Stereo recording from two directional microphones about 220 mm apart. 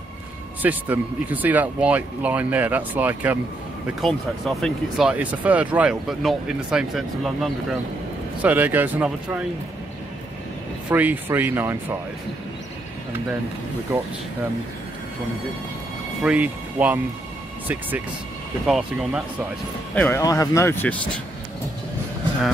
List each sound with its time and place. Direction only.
0.6 s speech: 5° right (ahead or behind)
10.9 s speech: 10° right (ahead or behind)
16.2 s speech: 5° right (ahead or behind)
18.7 s speech: centre (ahead or behind)
20.0 s speech: 15° left (ahead or behind)